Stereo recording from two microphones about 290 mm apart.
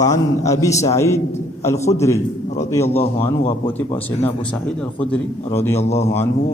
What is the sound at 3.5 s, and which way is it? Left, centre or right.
Speech, centre.